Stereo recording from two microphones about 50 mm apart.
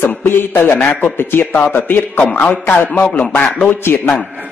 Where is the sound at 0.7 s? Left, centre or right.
Left.